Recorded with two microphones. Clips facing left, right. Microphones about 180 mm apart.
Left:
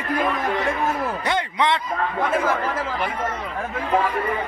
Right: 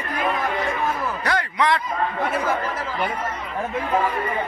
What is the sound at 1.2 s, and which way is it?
Speech, 25° left (ahead or behind).